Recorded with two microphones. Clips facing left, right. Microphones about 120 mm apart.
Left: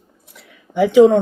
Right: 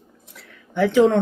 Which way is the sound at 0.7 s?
10° left (ahead or behind).